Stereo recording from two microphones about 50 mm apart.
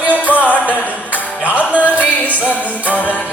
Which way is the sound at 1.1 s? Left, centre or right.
Right.